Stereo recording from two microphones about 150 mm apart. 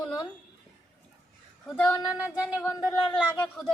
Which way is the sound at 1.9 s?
20° left (ahead or behind).